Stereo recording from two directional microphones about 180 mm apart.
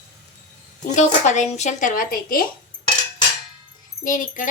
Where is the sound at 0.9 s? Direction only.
40° left (ahead or behind).